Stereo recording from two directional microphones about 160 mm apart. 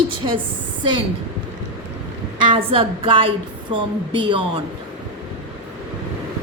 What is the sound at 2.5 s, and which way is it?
A woman's voice, 30° right (ahead or behind).